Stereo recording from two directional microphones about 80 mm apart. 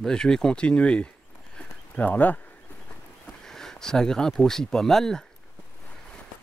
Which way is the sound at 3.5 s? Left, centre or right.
Centre.